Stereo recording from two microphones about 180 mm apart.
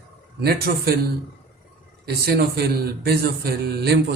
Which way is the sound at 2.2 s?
60° right (ahead or behind).